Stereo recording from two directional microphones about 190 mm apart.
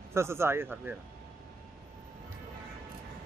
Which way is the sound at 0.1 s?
15° right (ahead or behind).